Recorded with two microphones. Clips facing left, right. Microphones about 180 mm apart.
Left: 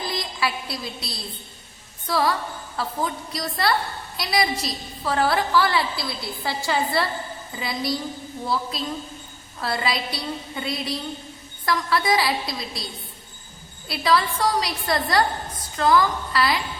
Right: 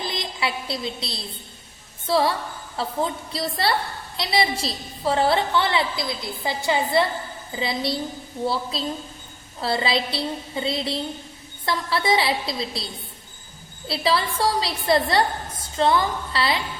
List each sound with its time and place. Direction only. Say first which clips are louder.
0.0 s a woman's voice: left 1 dB; 25° right (ahead or behind)